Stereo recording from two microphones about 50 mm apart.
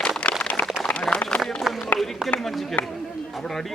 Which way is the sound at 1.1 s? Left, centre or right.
Centre.